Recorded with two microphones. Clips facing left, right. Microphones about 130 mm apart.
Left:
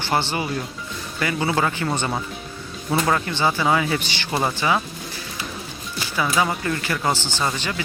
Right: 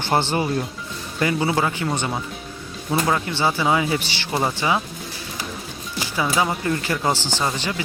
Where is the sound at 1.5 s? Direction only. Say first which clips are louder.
Even; 10° right (ahead or behind).